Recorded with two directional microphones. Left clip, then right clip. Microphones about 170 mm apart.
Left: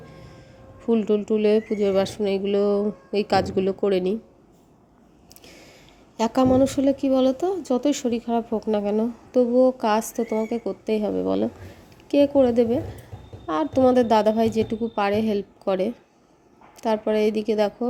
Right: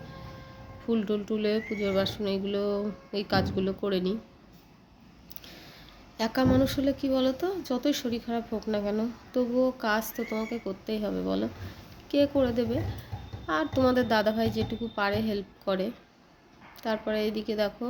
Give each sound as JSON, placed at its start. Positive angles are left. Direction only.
{"t": 0.9, "sound": "speech", "side_deg": 35}
{"t": 6.1, "sound": "a woman's voice", "side_deg": 40}